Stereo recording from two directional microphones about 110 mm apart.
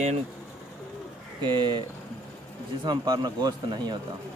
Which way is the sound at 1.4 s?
45° right (ahead or behind).